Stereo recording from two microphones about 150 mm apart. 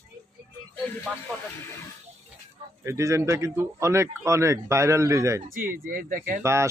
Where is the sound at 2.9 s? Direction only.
20° right (ahead or behind).